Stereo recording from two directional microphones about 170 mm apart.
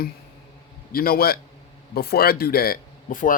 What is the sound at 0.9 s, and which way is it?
Speech, 60° left (ahead or behind).